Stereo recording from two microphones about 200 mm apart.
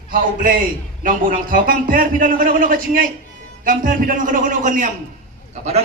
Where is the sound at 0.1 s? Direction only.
45° right (ahead or behind).